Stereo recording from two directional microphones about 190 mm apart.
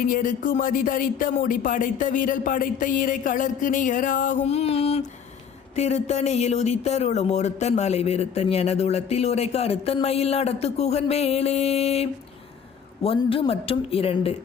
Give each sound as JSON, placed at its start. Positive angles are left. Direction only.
{"t": 0.0, "sound": "speech", "side_deg": 45}